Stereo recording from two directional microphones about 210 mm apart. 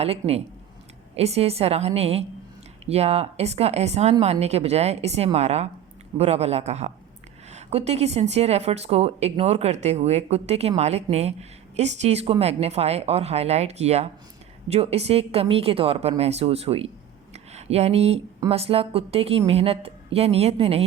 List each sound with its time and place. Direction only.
0.0 s speech: 30° right (ahead or behind)
17.3 s a sound: 30° right (ahead or behind)
18.3 s speech: 25° right (ahead or behind)